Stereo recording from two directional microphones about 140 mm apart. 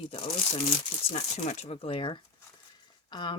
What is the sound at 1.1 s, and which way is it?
Speech, 50° left (ahead or behind).